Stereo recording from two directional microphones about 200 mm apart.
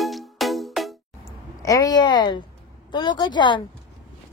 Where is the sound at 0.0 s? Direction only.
Centre (ahead or behind).